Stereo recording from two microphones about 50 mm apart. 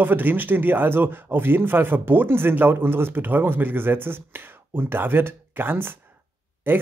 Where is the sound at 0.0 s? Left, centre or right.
Right.